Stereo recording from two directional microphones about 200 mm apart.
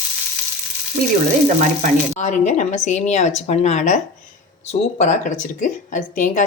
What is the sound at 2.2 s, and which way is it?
A woman's voice, 35° left (ahead or behind).